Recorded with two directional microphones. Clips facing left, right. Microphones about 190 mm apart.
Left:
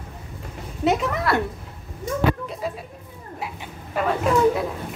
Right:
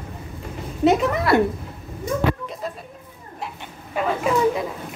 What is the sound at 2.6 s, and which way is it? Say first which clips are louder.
Speech: left 2 dB; 10° left (ahead or behind).